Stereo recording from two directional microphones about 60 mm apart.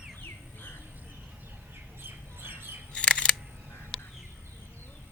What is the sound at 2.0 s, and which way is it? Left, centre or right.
Squawk, right.